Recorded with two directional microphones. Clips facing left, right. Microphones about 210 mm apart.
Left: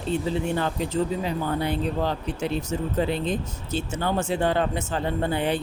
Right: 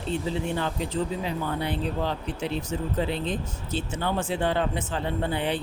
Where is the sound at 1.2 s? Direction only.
45° left (ahead or behind).